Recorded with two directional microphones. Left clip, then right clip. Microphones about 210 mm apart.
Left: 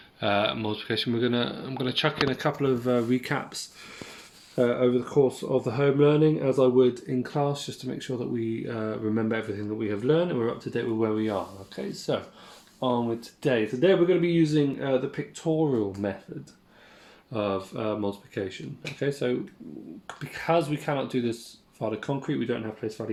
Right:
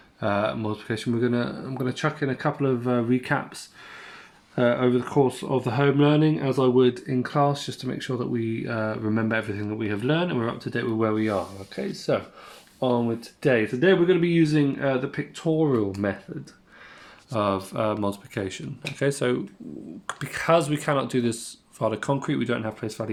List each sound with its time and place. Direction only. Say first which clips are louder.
0.2 s speech: even; 45° right (ahead or behind)
4.5 s speech: right 2 dB; 40° right (ahead or behind)
17.3 s speech: right 4 dB; 45° right (ahead or behind)